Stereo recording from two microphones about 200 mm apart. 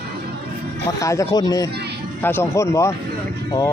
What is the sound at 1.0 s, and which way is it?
Speech, 15° left (ahead or behind).